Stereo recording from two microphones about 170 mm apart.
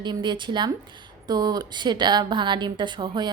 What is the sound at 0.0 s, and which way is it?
A woman's voice, 25° right (ahead or behind).